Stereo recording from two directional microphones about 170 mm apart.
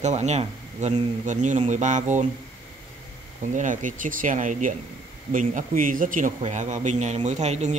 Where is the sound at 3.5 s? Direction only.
50° right (ahead or behind).